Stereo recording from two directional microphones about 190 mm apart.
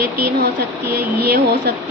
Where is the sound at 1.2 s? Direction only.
60° right (ahead or behind).